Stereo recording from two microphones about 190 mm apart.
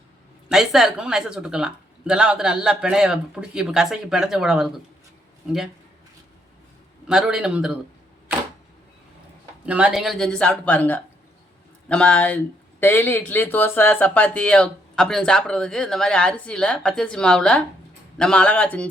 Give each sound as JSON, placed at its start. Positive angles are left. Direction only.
{"t": 0.4, "sound": "speech", "side_deg": 0}
{"t": 7.1, "sound": "speech", "side_deg": -5}
{"t": 9.6, "sound": "speech", "side_deg": -5}